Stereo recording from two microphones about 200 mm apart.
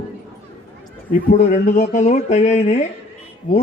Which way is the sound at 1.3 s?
40° left (ahead or behind).